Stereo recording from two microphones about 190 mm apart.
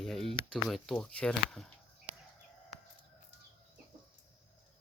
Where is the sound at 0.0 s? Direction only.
Centre (ahead or behind).